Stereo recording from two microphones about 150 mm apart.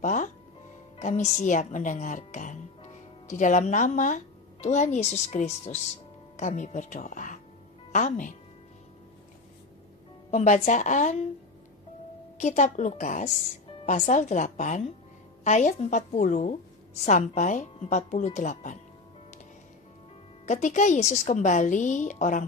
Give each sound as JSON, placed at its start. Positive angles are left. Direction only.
{"t": 0.0, "sound": "a woman's voice", "side_deg": 55}
{"t": 10.3, "sound": "speech", "side_deg": 55}
{"t": 12.4, "sound": "a woman's voice", "side_deg": 50}
{"t": 20.4, "sound": "a woman's voice", "side_deg": 55}